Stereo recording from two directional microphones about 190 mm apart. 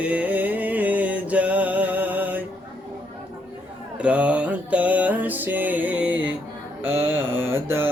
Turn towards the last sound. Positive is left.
turn(degrees=-10)  # may be behind; listen again after turning